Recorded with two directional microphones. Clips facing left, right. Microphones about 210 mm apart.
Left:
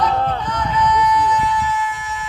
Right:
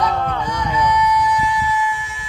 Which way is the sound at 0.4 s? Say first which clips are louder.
Even; 10° right (ahead or behind).